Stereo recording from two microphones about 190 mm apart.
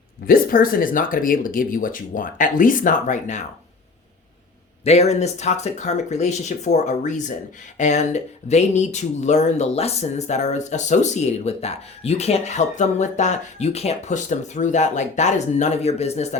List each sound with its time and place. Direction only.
0.3 s speech: 50° left (ahead or behind)
4.8 s speech: 35° left (ahead or behind)